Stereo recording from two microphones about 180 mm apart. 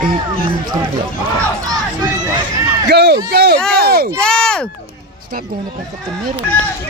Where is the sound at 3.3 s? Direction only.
65° right (ahead or behind).